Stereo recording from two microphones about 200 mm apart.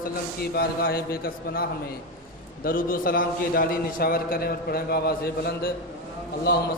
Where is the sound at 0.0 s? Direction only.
50° left (ahead or behind).